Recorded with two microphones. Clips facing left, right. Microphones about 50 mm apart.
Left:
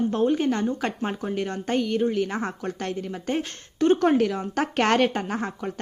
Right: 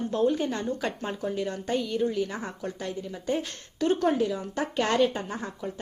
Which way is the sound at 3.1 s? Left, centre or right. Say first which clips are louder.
Left 2 dB; left.